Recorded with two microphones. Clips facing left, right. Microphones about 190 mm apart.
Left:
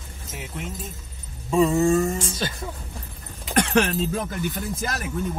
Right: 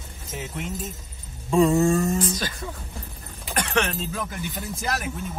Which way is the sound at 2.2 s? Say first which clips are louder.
Right 2 dB; 25° left (ahead or behind).